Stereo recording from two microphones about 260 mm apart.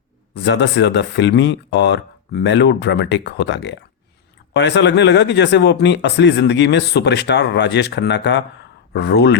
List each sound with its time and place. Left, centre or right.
0.4 s speech: left